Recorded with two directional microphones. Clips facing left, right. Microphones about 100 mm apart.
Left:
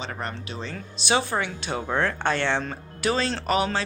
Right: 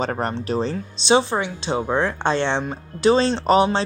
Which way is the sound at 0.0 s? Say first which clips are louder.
Right 9 dB; 45° right (ahead or behind).